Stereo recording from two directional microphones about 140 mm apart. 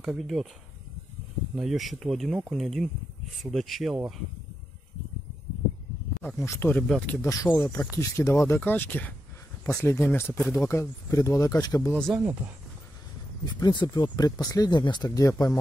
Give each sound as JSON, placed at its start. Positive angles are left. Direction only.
{"t": 0.0, "sound": "speech", "side_deg": 0}
{"t": 1.5, "sound": "speech", "side_deg": -5}
{"t": 6.4, "sound": "speech", "side_deg": 20}
{"t": 7.2, "sound": "speech", "side_deg": 25}
{"t": 12.1, "sound": "speech", "side_deg": -10}
{"t": 13.5, "sound": "speech", "side_deg": 30}